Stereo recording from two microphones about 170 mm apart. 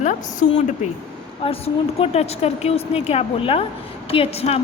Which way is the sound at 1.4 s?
35° left (ahead or behind).